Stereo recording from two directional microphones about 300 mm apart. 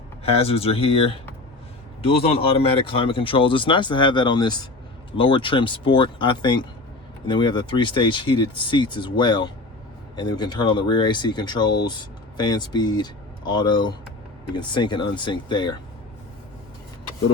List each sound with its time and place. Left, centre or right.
0.3 s speech: centre